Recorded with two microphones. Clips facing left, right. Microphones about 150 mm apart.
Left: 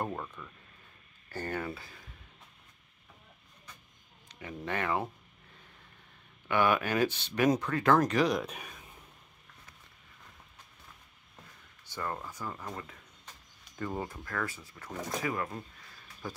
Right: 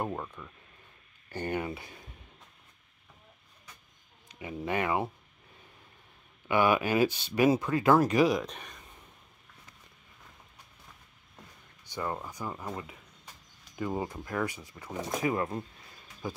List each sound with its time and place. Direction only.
0.0 s speech: 10° right (ahead or behind)
4.3 s speech: 10° right (ahead or behind)
6.4 s speech: 10° right (ahead or behind)
8.4 s speech: 5° left (ahead or behind)
11.9 s speech: 15° right (ahead or behind)